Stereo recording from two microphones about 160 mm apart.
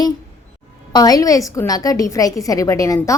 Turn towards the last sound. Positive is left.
turn(degrees=20)  # may be behind; listen again after turning